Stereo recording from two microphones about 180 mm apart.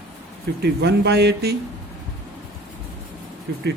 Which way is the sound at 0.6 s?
70° right (ahead or behind).